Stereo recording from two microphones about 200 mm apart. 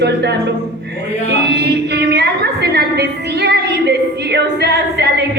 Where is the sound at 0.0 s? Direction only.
55° right (ahead or behind).